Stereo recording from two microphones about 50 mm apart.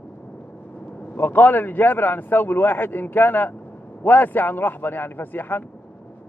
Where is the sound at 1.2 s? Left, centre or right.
Left.